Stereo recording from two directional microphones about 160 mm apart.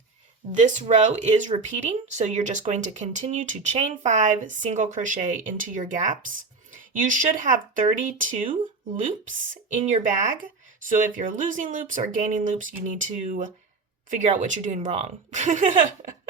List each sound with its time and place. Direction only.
0.5 s speech: 50° right (ahead or behind)
9.9 s speech: 55° right (ahead or behind)